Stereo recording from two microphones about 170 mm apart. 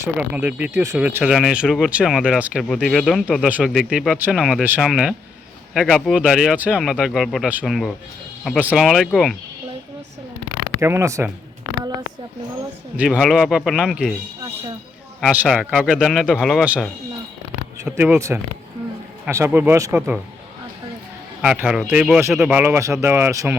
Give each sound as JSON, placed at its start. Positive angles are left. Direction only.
{"t": 0.0, "sound": "speech", "side_deg": -10}
{"t": 10.8, "sound": "speech", "side_deg": -15}
{"t": 13.0, "sound": "speech", "side_deg": 0}
{"t": 15.2, "sound": "speech", "side_deg": -5}
{"t": 17.9, "sound": "speech", "side_deg": -10}
{"t": 21.4, "sound": "speech", "side_deg": -5}
{"t": 22.6, "sound": "speech", "side_deg": -15}